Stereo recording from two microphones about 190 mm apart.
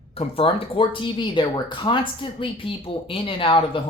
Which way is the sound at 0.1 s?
30° left (ahead or behind).